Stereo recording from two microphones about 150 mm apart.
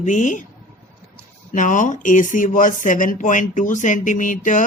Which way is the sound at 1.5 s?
60° left (ahead or behind).